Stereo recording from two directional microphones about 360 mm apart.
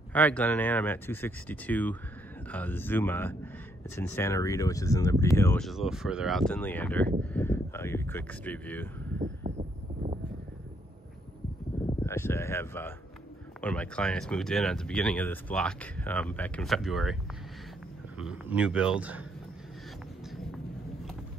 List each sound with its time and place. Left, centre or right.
0.1 s speech: centre
9.2 s a sound: centre
12.0 s speech: centre
18.2 s speech: centre